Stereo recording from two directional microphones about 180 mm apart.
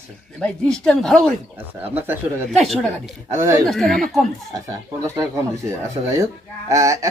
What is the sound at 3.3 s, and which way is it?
Speech, 15° right (ahead or behind).